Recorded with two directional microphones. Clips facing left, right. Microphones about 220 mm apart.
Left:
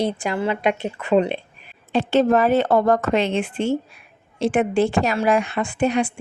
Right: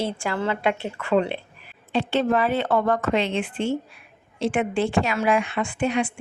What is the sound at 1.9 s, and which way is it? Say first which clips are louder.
A woman's voice: left 5 dB; 40° left (ahead or behind).